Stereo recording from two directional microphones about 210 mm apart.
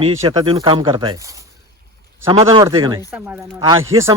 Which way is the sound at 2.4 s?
20° right (ahead or behind).